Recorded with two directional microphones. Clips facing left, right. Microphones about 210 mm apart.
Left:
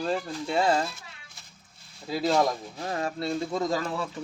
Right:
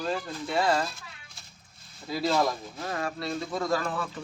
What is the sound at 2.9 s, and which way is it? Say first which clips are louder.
Speech: left 3 dB; 25° left (ahead or behind).